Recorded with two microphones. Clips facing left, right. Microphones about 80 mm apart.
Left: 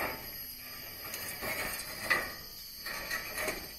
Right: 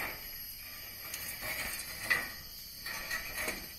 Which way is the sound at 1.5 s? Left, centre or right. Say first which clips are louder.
Left 3 dB; centre.